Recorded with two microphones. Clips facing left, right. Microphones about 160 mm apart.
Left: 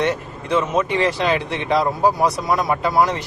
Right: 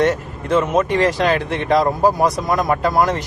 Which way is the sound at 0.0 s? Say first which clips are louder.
Right 4 dB; 45° right (ahead or behind).